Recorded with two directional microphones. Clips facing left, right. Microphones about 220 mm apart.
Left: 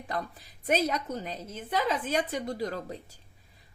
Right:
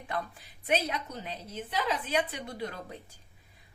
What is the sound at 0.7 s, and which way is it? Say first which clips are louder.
A woman's voice: left 3 dB; 45° left (ahead or behind).